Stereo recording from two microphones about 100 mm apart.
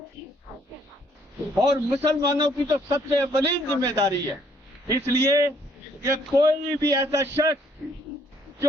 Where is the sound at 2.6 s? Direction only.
35° right (ahead or behind).